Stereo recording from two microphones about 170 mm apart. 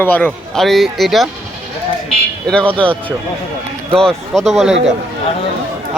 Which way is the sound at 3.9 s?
5° left (ahead or behind).